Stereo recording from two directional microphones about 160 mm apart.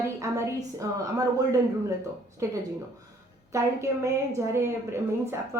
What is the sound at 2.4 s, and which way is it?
A woman's voice, 20° right (ahead or behind).